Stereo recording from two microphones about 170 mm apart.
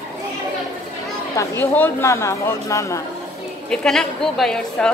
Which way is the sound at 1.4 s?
15° left (ahead or behind).